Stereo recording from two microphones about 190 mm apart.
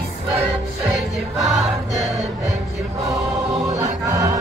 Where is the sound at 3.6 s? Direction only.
15° right (ahead or behind).